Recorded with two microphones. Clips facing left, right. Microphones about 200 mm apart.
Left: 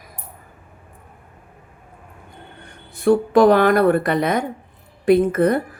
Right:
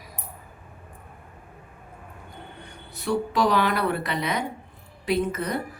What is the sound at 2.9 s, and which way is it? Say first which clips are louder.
Speech: left 11 dB; 50° left (ahead or behind).